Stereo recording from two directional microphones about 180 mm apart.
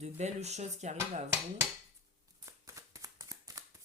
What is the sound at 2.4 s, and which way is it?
Shuffling cards, 20° right (ahead or behind).